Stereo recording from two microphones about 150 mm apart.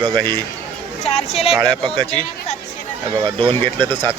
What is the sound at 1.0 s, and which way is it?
Speech, 45° left (ahead or behind).